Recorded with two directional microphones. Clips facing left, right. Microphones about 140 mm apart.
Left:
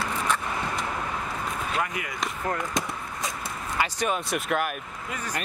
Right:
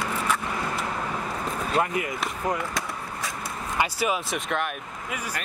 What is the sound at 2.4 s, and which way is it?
Speech, 15° right (ahead or behind).